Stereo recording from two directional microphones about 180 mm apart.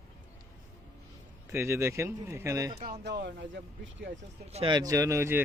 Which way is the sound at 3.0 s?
70° right (ahead or behind).